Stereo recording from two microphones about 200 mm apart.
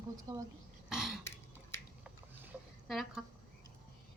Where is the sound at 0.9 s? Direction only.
Centre (ahead or behind).